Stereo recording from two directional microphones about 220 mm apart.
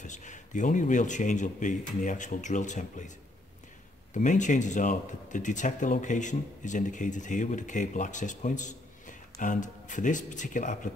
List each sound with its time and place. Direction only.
0.0 s speech: 35° left (ahead or behind)
4.1 s speech: 35° left (ahead or behind)